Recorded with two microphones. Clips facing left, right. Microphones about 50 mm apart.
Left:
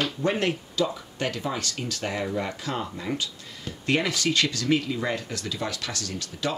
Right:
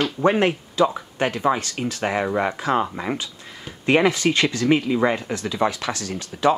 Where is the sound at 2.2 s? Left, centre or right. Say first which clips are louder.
Right 7 dB; right.